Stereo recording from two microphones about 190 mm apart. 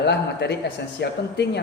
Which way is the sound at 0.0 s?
65° left (ahead or behind).